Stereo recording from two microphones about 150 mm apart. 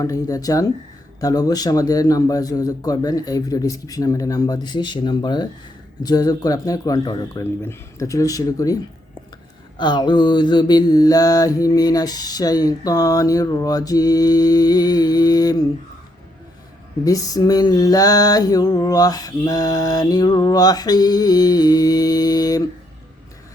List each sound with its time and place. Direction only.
0.0 s mantra: 25° left (ahead or behind)
17.0 s mantra: 25° left (ahead or behind)